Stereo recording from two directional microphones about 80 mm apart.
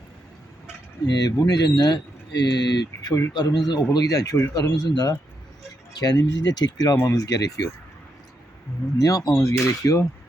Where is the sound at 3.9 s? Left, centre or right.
Left.